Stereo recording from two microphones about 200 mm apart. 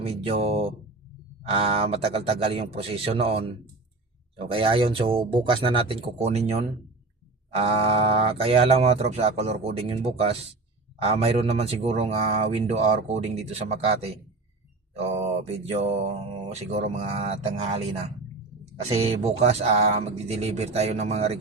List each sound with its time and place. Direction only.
0.0 s speech: 30° right (ahead or behind)
16.5 s speech: 35° right (ahead or behind)